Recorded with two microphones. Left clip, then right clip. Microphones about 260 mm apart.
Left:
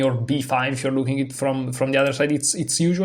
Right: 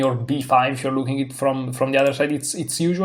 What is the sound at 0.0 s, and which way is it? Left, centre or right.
Speech, left.